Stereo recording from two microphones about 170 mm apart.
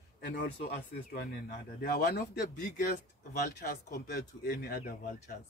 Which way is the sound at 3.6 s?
65° left (ahead or behind).